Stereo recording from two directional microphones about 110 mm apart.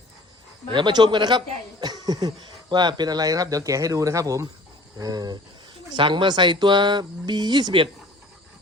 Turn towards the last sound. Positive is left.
turn(degrees=-45)  # may be behind; listen again after turning